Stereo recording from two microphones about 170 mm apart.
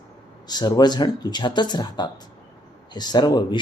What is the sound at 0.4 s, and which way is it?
Speech, 25° left (ahead or behind).